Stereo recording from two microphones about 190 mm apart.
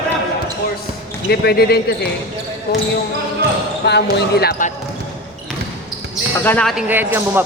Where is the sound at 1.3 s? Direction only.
60° left (ahead or behind).